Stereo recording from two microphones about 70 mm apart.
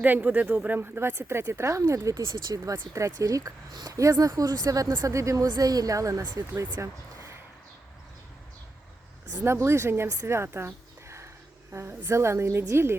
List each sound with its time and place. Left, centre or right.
0.0 s speech: right
2.2 s speech: right
2.9 s speech: right
5.0 s speech: right
6.7 s a sound: right
9.4 s speech: right
10.2 s a sound: right
11.7 s speech: right